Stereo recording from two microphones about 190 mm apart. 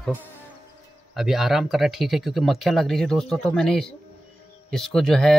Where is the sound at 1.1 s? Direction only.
Centre (ahead or behind).